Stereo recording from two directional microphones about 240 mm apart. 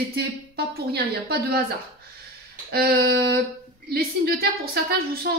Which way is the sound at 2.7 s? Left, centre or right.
Right.